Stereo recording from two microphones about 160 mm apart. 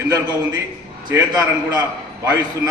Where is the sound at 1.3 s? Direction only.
25° right (ahead or behind).